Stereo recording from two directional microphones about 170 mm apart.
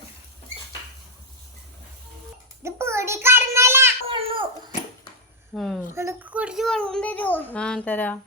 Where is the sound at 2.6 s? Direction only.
15° right (ahead or behind).